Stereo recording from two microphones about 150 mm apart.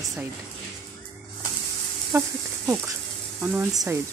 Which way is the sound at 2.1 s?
20° right (ahead or behind).